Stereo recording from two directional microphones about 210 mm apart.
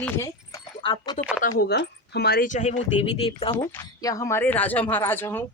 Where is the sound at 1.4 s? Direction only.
50° left (ahead or behind); by 3.5 s 25° left (ahead or behind).